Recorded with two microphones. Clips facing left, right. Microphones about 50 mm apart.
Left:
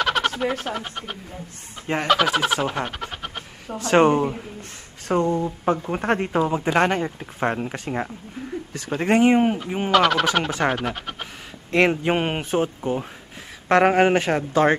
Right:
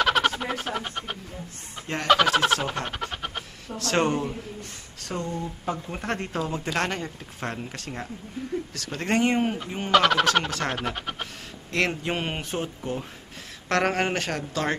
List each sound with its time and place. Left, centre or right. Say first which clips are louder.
0.0 s a sound: left 1 dB; centre
2.0 s fowl: right 1 dB; centre
3.6 s speech: left 8 dB; centre
9.8 s speech: left 1 dB; centre
11.7 s speech: left 7 dB; left